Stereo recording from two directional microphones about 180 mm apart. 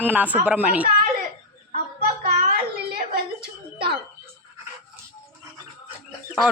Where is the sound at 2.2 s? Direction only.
50° right (ahead or behind).